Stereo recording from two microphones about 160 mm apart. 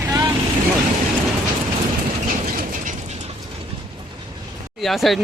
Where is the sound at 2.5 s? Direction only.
55° right (ahead or behind).